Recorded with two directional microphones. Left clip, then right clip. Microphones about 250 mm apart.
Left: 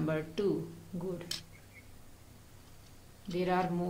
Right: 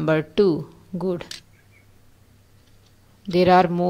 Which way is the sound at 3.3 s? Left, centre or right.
Right.